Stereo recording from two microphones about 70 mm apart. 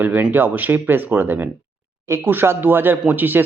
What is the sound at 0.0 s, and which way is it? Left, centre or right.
Speech, right.